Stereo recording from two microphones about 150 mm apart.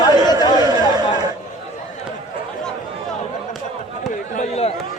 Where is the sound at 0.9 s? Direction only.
30° right (ahead or behind).